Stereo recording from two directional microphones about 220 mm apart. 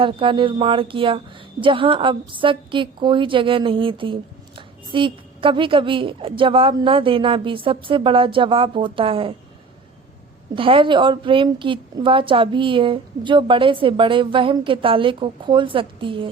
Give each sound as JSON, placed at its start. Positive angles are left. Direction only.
{"t": 0.0, "sound": "a woman's voice", "side_deg": -25}
{"t": 10.5, "sound": "a woman's voice", "side_deg": -25}